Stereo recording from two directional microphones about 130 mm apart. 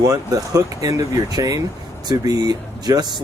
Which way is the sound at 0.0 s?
25° right (ahead or behind).